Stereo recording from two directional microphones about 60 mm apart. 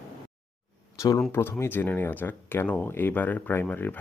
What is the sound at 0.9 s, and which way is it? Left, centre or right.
Speech, left.